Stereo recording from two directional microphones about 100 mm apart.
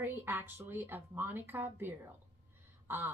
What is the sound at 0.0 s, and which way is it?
Speech, 20° right (ahead or behind).